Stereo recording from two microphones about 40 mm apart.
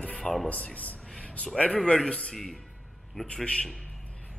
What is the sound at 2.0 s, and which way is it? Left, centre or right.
Speech, left.